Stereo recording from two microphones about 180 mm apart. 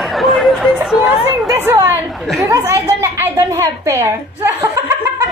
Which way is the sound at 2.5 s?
15° right (ahead or behind).